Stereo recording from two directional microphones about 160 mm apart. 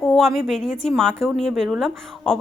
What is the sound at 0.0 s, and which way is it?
A woman's voice, centre (ahead or behind).